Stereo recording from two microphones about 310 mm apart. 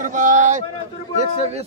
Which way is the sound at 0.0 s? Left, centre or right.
Right.